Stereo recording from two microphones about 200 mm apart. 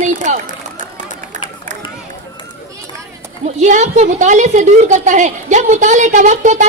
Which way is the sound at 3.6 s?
35° right (ahead or behind).